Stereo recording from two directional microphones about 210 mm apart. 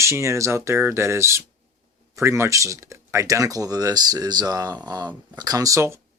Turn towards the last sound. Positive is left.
turn(degrees=-10)  # may be behind; listen again after turning